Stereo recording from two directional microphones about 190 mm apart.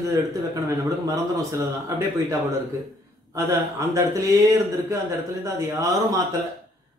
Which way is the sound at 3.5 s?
15° right (ahead or behind).